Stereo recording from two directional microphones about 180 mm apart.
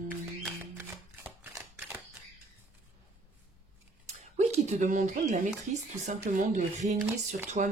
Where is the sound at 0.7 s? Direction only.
10° right (ahead or behind).